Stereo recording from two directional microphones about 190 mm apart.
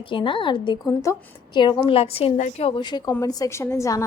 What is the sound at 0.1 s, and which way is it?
A woman's voice, 25° left (ahead or behind).